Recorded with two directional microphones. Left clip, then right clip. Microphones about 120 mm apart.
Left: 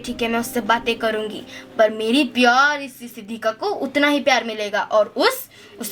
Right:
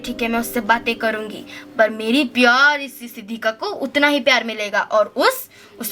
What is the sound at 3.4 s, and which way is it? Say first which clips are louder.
A woman's voice: even; 40° right (ahead or behind).